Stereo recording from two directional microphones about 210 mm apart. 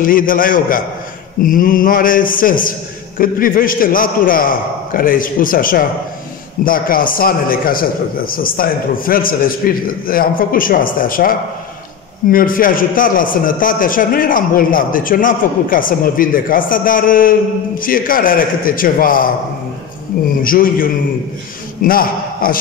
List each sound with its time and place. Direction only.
0.0 s a man's voice: 40° left (ahead or behind)
20.4 s a man's voice: 40° left (ahead or behind)